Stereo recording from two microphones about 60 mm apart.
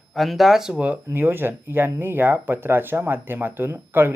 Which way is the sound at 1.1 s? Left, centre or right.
Right.